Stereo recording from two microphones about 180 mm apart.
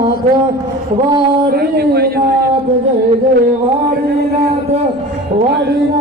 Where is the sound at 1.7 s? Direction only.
60° right (ahead or behind).